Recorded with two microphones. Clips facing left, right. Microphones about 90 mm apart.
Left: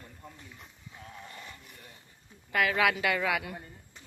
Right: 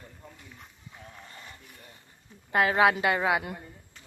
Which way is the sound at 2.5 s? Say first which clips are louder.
Right 4 dB; 30° right (ahead or behind).